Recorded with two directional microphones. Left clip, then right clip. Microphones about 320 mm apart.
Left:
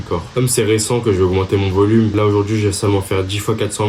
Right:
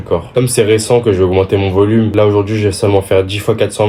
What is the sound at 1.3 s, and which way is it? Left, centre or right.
Speech, centre.